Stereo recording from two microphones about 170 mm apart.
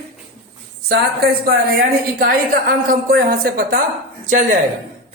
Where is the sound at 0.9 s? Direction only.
65° right (ahead or behind).